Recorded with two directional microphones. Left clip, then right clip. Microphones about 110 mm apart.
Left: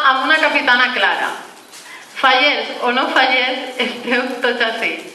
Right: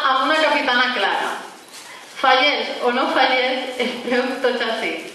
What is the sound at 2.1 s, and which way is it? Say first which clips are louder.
A woman's voice: left 3 dB; 25° left (ahead or behind).